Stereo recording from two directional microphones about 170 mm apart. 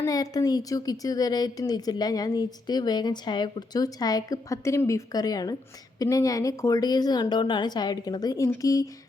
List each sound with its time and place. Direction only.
0.0 s a woman's voice: 20° left (ahead or behind)